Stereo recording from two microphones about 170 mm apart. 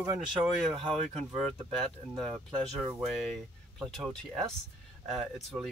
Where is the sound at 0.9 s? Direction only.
40° right (ahead or behind).